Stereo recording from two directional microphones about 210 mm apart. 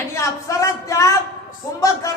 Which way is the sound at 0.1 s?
15° left (ahead or behind).